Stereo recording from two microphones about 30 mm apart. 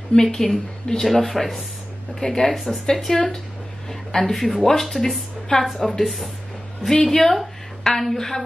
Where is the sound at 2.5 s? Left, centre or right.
Centre.